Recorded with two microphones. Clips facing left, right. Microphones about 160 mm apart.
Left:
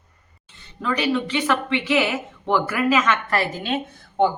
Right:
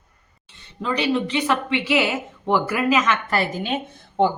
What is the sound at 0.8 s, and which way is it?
A woman's voice, 20° right (ahead or behind).